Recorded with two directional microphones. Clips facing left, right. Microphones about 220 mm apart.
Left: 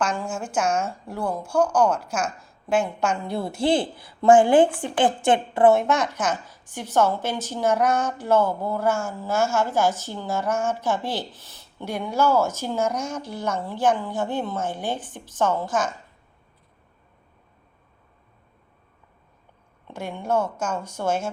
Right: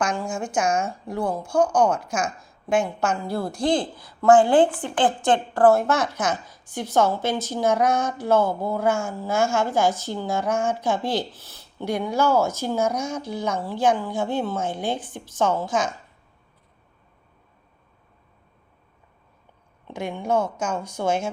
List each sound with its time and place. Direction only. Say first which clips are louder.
0.3 s a woman's voice: right 1 dB; 5° left (ahead or behind)
3.5 s a woman's voice: left 1 dB; 25° left (ahead or behind)
3.8 s a woman's voice: left 1 dB; 10° left (ahead or behind)
5.2 s a woman's voice: even; 25° left (ahead or behind)
5.7 s a woman's voice: even; 5° right (ahead or behind)
19.9 s a woman's voice: right 1 dB; 10° right (ahead or behind)